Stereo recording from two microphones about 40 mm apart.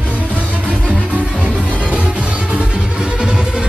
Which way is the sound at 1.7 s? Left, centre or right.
Right.